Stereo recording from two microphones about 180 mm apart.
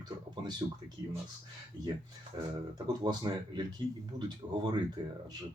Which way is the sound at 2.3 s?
30° right (ahead or behind).